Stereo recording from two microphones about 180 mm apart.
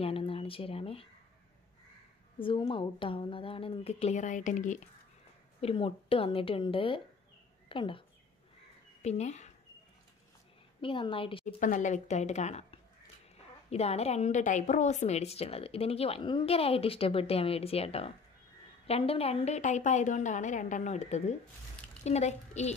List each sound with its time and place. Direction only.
0.0 s a sound: 30° left (ahead or behind)
2.3 s a woman's voice: 30° left (ahead or behind)
5.6 s a woman's voice: 30° left (ahead or behind)
9.0 s a woman's voice: 40° left (ahead or behind)
10.8 s a woman's voice: 30° left (ahead or behind)
11.4 s a woman's voice: 45° left (ahead or behind)